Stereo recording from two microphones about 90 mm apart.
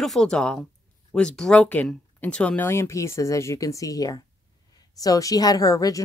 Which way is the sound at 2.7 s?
30° left (ahead or behind).